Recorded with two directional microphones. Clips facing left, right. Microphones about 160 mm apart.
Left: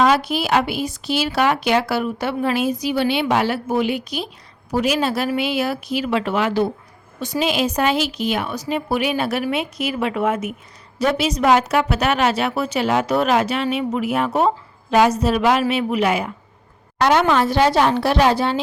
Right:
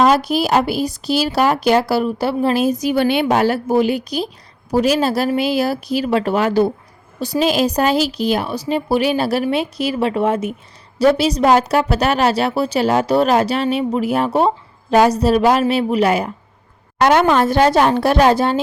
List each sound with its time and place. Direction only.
0.0 s speech: 40° right (ahead or behind)
17.0 s a woman's voice: 50° right (ahead or behind)